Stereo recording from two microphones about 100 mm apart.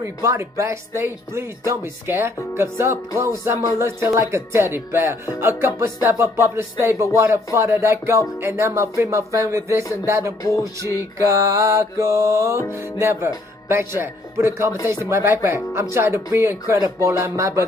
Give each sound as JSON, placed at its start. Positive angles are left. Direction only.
{"t": 0.0, "sound": "speech", "side_deg": -30}
{"t": 11.1, "sound": "mantra", "side_deg": -30}
{"t": 12.7, "sound": "speech", "side_deg": -25}